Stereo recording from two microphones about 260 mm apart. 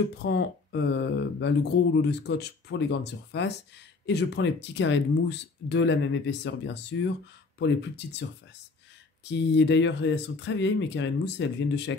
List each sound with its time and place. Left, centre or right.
0.2 s speech: left
9.2 s speech: left